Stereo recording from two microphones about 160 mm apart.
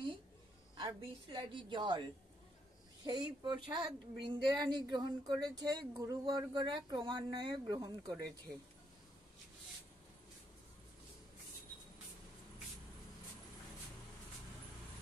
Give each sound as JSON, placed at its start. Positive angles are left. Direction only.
{"t": 0.7, "sound": "speech", "side_deg": -25}
{"t": 3.1, "sound": "speech", "side_deg": -25}